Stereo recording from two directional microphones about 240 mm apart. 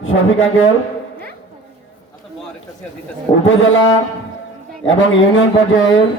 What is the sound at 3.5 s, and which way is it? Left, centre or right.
A man's voice, left.